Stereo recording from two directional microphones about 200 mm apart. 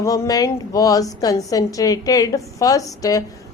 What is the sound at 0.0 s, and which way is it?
A woman's voice, 15° left (ahead or behind).